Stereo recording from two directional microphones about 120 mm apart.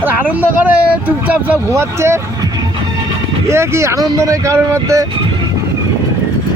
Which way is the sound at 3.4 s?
20° right (ahead or behind).